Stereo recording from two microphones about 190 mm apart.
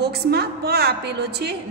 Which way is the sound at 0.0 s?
60° right (ahead or behind).